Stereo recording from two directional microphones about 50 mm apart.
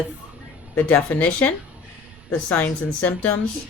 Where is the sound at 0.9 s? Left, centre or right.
Left.